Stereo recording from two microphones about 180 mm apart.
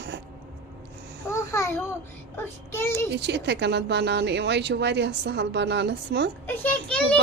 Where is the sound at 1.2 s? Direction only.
15° left (ahead or behind).